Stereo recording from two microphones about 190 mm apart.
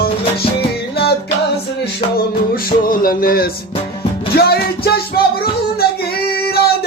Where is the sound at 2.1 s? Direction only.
50° left (ahead or behind).